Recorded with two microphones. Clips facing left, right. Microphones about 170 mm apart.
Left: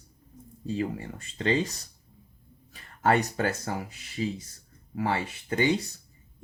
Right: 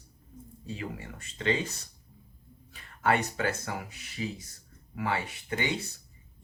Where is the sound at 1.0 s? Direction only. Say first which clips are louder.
Left 4 dB; 35° left (ahead or behind).